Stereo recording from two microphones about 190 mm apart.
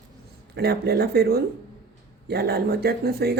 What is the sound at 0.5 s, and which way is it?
Speech, 60° right (ahead or behind).